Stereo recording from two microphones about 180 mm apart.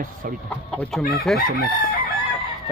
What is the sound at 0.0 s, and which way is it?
Speech, 50° right (ahead or behind).